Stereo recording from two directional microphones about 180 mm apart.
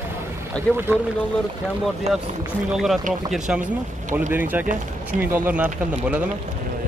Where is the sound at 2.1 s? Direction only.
35° right (ahead or behind).